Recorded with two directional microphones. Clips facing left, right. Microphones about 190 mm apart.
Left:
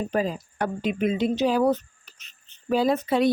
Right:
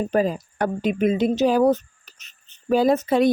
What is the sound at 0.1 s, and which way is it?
Speech, 50° right (ahead or behind).